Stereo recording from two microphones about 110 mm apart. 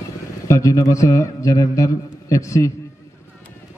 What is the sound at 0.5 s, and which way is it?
A man's voice, 30° left (ahead or behind).